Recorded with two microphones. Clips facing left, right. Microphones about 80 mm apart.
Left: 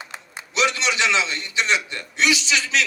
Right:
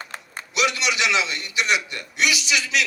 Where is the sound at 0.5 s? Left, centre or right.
Left.